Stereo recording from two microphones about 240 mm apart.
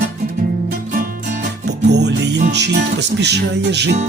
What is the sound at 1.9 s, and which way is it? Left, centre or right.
Music, right.